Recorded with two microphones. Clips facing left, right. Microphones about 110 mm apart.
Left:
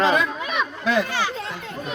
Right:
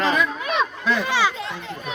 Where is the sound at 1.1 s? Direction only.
90° right.